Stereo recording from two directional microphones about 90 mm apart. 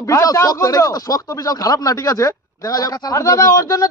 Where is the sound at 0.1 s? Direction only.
40° left (ahead or behind).